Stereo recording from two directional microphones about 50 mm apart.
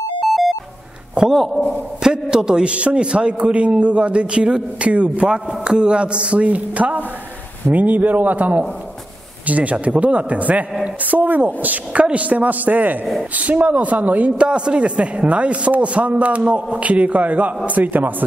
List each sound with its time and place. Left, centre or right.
1.3 s a man's voice: centre
2.0 s a man's voice: centre; by 14.3 s right
14.4 s a man's voice: right